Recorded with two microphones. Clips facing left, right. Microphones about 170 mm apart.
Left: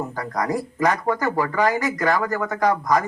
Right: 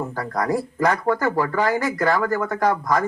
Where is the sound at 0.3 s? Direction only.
15° left (ahead or behind).